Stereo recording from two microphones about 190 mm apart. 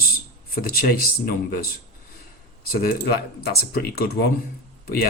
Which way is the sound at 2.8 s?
50° left (ahead or behind).